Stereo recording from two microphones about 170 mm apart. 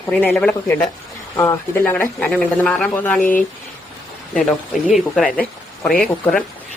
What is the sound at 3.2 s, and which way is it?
Speech, 55° left (ahead or behind).